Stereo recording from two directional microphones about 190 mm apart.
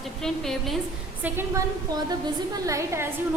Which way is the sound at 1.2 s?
10° right (ahead or behind).